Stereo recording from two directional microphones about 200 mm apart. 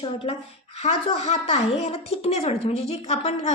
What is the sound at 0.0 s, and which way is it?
A woman's voice, 25° left (ahead or behind).